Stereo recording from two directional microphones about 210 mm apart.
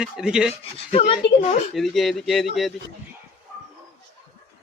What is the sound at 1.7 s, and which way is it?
Speech, centre (ahead or behind).